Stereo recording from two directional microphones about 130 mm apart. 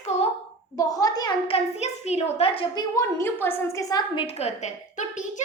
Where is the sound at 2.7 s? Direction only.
25° left (ahead or behind).